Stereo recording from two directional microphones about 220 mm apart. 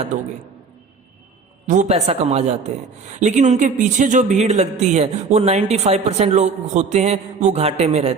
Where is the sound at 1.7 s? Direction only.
30° right (ahead or behind).